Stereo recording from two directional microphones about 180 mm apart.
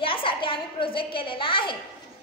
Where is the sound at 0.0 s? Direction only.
30° left (ahead or behind).